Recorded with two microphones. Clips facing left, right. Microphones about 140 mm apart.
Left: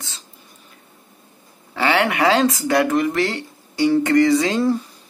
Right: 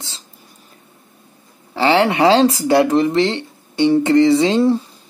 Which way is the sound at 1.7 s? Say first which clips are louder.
Right 4 dB; 30° right (ahead or behind).